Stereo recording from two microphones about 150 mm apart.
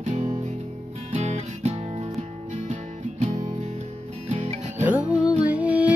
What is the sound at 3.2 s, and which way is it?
Music, 55° right (ahead or behind).